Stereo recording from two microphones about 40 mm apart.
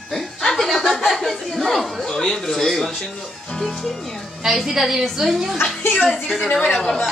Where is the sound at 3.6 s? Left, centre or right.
Centre.